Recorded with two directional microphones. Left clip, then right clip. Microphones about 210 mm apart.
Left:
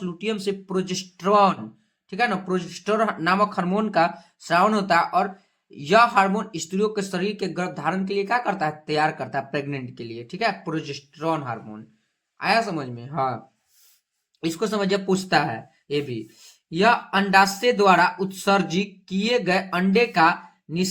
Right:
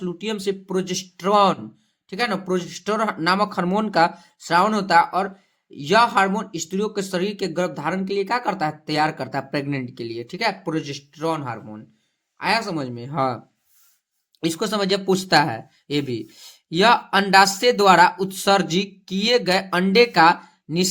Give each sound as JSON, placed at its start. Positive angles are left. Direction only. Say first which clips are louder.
{"t": 0.0, "sound": "speech", "louder": "right 1 dB", "side_deg": -25}
{"t": 14.4, "sound": "speech", "louder": "right 2 dB", "side_deg": -35}